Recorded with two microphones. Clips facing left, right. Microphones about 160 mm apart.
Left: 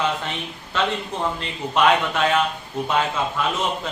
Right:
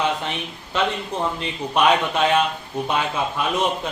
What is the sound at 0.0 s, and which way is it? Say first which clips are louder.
Speech: right 1 dB; 20° right (ahead or behind).